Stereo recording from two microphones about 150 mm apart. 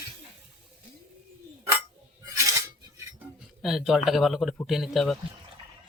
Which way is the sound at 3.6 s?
5° right (ahead or behind).